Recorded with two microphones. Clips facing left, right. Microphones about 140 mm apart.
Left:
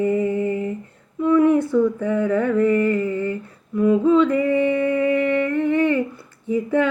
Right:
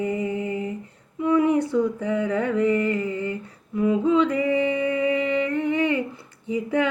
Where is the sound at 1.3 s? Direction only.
20° right (ahead or behind).